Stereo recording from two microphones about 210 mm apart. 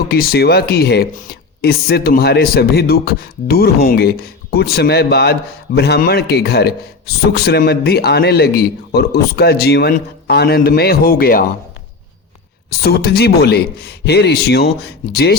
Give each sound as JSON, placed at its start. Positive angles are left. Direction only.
{"t": 0.1, "sound": "speech", "side_deg": 45}
{"t": 12.8, "sound": "speech", "side_deg": 50}